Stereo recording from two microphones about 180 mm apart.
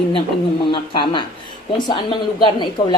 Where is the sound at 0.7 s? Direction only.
25° left (ahead or behind).